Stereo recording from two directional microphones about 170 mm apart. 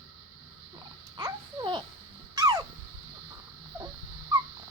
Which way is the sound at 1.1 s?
25° right (ahead or behind).